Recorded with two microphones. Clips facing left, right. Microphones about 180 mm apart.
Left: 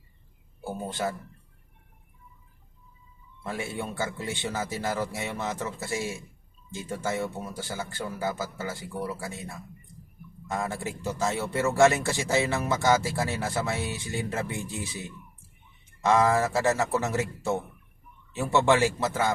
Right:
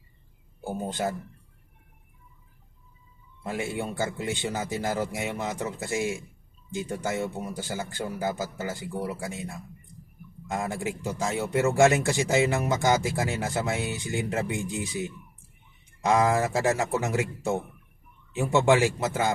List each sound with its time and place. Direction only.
3.4 s speech: 20° right (ahead or behind)
10.5 s speech: 15° right (ahead or behind)
16.0 s speech: 15° right (ahead or behind)
18.3 s speech: 15° right (ahead or behind)